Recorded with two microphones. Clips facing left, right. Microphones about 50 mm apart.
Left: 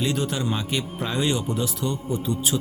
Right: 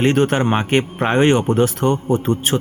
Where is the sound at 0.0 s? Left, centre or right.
Right.